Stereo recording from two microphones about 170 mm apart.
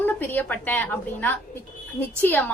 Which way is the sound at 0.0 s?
10° left (ahead or behind).